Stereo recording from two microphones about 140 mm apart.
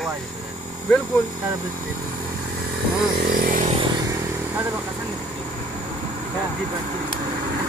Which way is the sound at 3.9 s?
25° right (ahead or behind).